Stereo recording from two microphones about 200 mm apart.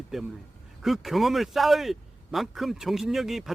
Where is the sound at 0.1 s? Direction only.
Centre (ahead or behind).